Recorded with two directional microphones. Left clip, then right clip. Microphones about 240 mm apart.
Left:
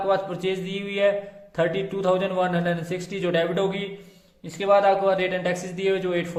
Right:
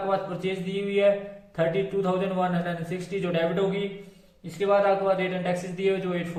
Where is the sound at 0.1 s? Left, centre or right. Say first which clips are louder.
Left 5 dB; left.